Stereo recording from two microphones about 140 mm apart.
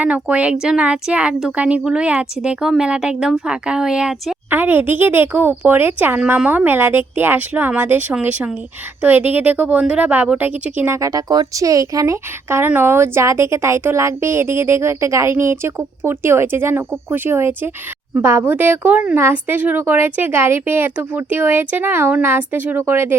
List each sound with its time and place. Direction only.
0.0 s a woman's voice: 10° right (ahead or behind)